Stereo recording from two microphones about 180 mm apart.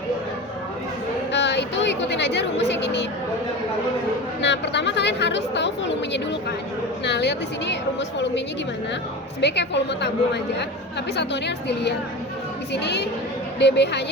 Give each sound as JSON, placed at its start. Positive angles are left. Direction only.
{"t": 1.3, "sound": "speech", "side_deg": 75}
{"t": 4.4, "sound": "a woman's voice", "side_deg": 75}
{"t": 9.4, "sound": "a woman's voice", "side_deg": 70}